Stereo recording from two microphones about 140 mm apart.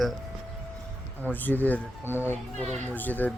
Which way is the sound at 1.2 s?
10° left (ahead or behind).